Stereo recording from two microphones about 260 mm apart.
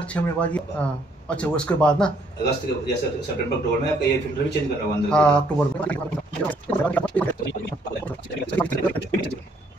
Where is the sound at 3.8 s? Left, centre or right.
Left.